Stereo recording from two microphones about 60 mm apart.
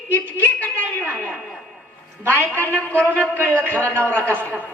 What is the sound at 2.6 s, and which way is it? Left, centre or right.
A man's voice, left.